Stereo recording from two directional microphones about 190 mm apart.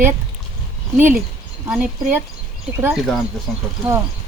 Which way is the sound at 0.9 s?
10° right (ahead or behind).